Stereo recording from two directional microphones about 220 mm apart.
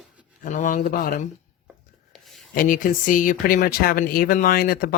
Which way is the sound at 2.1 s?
Centre (ahead or behind).